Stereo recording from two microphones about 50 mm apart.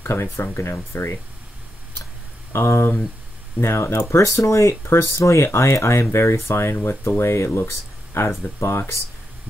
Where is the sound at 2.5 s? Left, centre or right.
Left.